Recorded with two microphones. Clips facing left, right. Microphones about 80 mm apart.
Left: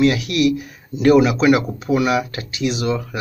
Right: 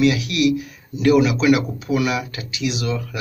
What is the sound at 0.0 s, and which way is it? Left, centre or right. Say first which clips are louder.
Speech: left 1 dB; left.